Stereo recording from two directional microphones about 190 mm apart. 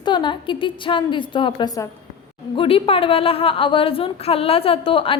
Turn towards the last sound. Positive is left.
turn(degrees=30)  # may be behind; listen again after turning